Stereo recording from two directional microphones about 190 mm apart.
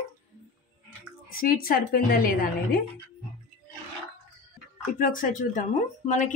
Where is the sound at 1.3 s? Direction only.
50° left (ahead or behind).